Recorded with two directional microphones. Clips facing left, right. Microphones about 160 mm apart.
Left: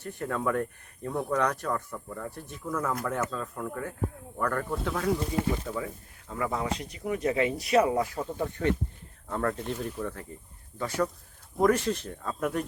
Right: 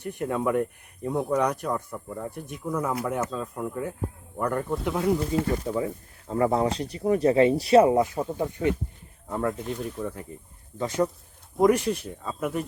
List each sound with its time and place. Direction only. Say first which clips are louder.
0.0 s speech: right 4 dB; 15° right (ahead or behind)
10.8 s speech: right 4 dB; 20° right (ahead or behind); by 12.6 s 5° right (ahead or behind)